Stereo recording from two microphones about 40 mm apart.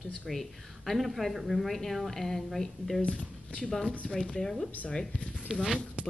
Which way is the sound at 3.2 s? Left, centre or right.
Left.